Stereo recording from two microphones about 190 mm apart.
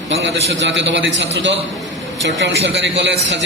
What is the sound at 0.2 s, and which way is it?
A woman's voice, 70° right (ahead or behind).